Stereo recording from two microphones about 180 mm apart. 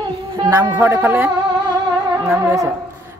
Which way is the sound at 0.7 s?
10° right (ahead or behind).